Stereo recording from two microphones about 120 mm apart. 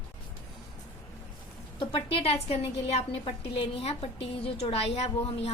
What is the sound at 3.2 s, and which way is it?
A woman's voice, 50° left (ahead or behind).